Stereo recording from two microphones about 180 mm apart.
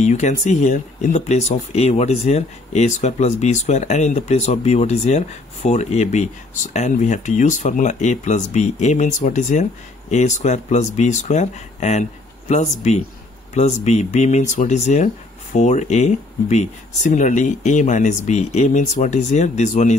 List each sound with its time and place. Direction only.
0.0 s speech: 40° left (ahead or behind)